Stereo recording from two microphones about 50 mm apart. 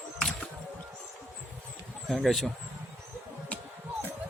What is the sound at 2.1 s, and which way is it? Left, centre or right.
Speech, centre.